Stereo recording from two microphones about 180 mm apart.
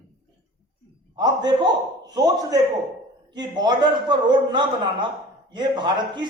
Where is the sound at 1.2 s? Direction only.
25° right (ahead or behind).